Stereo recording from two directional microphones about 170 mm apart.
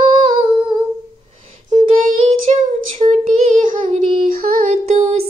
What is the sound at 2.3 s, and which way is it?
Child singing, 40° right (ahead or behind).